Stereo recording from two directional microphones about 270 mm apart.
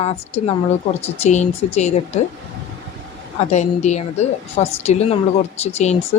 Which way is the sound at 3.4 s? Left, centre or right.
Left.